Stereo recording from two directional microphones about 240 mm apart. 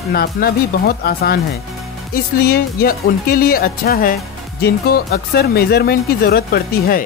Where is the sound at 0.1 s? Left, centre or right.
Left.